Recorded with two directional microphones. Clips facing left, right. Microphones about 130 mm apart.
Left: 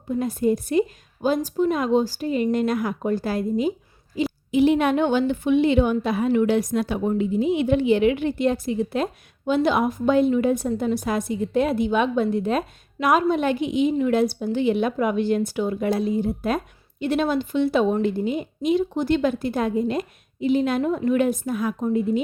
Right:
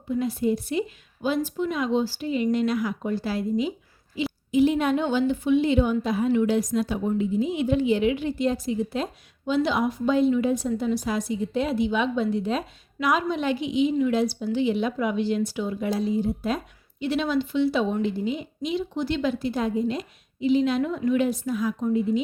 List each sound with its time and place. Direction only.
0.1 s a woman's voice: 45° left (ahead or behind)
4.5 s a woman's voice: 70° left (ahead or behind); by 22.2 s 55° left (ahead or behind)